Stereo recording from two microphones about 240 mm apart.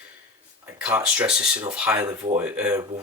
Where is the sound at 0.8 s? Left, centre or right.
Centre.